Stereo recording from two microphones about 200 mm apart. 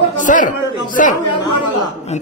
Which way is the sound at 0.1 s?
40° left (ahead or behind).